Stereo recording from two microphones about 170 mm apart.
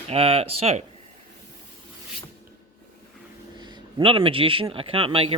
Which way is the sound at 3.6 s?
25° right (ahead or behind).